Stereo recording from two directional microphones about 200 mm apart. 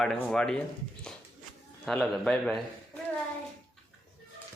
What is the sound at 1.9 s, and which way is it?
Speech, centre (ahead or behind).